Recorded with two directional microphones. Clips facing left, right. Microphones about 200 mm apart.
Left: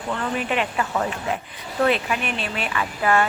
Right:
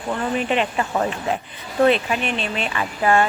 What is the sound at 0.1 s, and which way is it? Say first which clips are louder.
Speech: right 3 dB; 20° right (ahead or behind).